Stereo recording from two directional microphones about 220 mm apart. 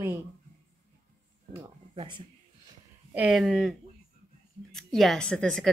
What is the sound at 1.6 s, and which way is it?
Speech, 20° right (ahead or behind).